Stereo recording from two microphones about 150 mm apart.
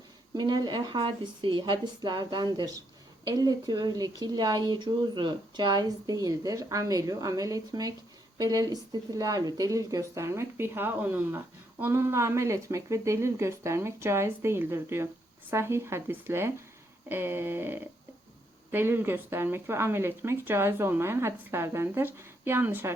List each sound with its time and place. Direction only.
0.3 s a woman's voice: 30° right (ahead or behind)